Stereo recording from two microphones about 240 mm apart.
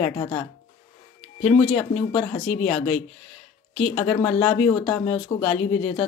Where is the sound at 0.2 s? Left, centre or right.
Left.